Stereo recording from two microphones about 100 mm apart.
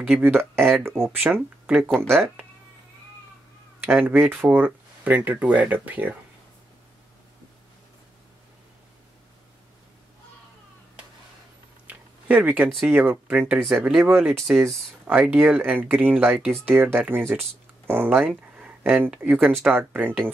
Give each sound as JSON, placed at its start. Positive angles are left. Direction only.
{"t": 0.0, "sound": "speech", "side_deg": -15}
{"t": 3.8, "sound": "speech", "side_deg": -20}
{"t": 11.9, "sound": "a sound", "side_deg": -15}
{"t": 12.8, "sound": "speech", "side_deg": -20}